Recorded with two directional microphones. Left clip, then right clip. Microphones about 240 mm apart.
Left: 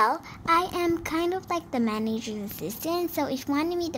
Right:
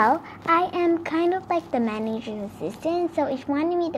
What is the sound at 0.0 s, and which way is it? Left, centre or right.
A child's voice, left.